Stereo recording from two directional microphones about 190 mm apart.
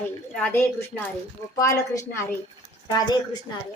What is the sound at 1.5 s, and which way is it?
Speech, 15° left (ahead or behind).